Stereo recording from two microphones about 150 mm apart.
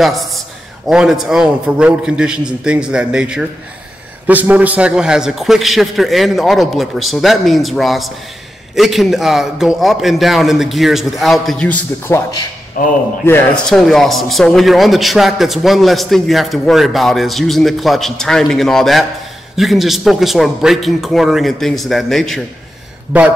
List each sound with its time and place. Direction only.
0.0 s a man's voice: centre (ahead or behind); by 12.4 s 15° left (ahead or behind)
12.8 s a man's voice: 70° left (ahead or behind)
13.2 s a man's voice: 15° left (ahead or behind)
13.7 s a man's voice: centre (ahead or behind)